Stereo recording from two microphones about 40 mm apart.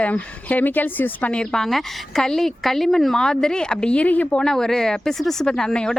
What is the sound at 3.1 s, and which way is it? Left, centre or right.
Speech, centre.